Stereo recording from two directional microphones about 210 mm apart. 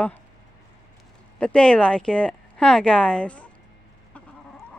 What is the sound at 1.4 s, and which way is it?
Speech, 5° left (ahead or behind).